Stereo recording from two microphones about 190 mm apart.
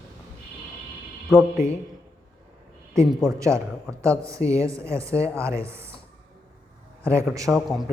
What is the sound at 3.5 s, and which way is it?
Speech, 15° right (ahead or behind).